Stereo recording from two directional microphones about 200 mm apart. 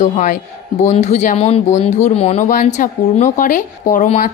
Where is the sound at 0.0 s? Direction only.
35° left (ahead or behind).